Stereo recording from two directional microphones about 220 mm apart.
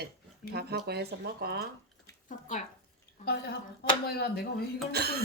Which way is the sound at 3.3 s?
45° left (ahead or behind).